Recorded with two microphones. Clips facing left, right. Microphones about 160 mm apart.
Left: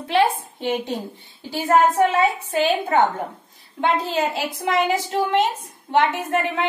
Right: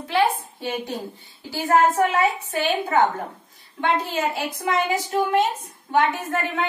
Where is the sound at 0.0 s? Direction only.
25° left (ahead or behind).